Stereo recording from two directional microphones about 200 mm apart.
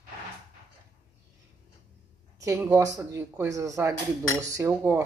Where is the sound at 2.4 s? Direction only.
10° right (ahead or behind).